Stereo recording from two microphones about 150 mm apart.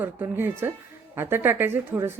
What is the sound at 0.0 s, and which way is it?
Speech, 15° right (ahead or behind).